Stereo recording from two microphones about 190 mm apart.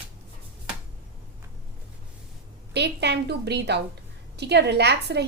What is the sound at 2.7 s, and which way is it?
A woman's voice, 60° right (ahead or behind).